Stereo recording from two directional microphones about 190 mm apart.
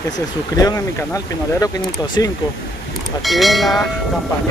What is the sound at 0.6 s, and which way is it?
Speech, 20° left (ahead or behind).